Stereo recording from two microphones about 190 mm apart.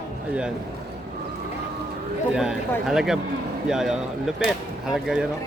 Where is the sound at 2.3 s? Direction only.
5° right (ahead or behind).